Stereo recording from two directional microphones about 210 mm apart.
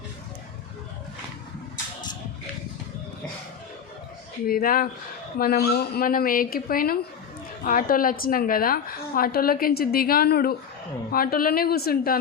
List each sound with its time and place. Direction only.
4.4 s a woman's voice: 45° left (ahead or behind)